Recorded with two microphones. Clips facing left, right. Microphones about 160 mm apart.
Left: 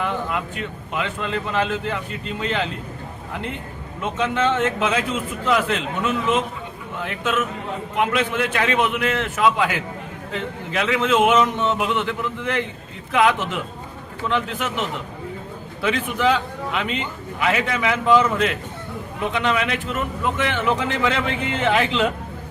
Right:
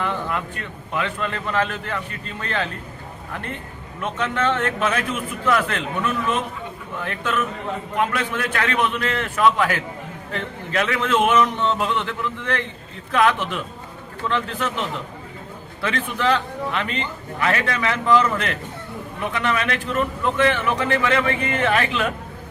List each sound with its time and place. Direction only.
0.0 s speech: 15° left (ahead or behind)
4.0 s speech: 15° left (ahead or behind)